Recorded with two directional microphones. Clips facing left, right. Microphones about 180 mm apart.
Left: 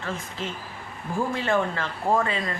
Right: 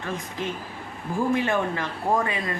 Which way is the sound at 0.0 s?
15° right (ahead or behind).